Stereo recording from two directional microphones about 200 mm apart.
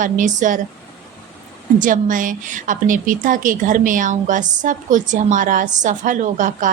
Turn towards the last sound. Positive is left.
turn(degrees=-40)  # may be behind; listen again after turning